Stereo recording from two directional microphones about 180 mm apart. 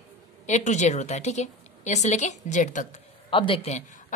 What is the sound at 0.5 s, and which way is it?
A woman's voice, 40° left (ahead or behind).